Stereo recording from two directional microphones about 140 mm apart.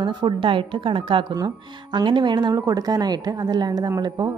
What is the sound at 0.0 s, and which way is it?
A woman's voice, 35° right (ahead or behind).